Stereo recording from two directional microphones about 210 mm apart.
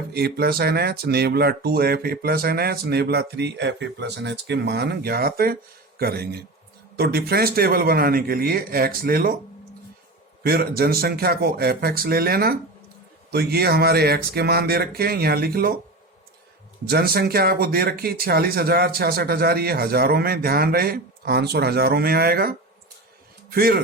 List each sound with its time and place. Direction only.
0.1 s speech: 50° right (ahead or behind)
10.4 s speech: 45° right (ahead or behind)
16.9 s speech: 45° right (ahead or behind)